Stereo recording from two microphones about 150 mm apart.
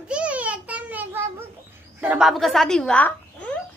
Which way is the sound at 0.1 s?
10° right (ahead or behind).